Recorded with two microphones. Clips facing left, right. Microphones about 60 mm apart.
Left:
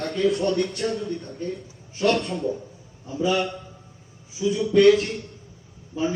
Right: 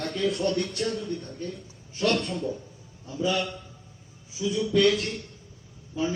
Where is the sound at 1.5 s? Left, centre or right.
Left.